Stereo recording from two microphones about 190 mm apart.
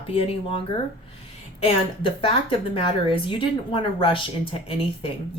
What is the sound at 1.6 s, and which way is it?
A woman's voice, 30° left (ahead or behind).